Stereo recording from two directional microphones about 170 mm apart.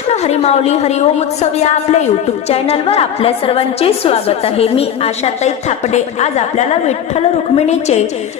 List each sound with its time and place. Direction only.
0.1 s a woman's voice: 40° left (ahead or behind)